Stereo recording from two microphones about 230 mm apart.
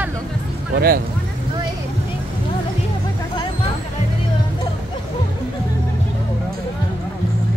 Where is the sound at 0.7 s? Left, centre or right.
Right.